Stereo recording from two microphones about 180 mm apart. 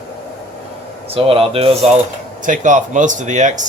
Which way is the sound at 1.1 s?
30° right (ahead or behind).